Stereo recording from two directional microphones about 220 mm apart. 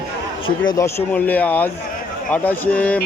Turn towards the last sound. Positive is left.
turn(degrees=5)  # may be behind; listen again after turning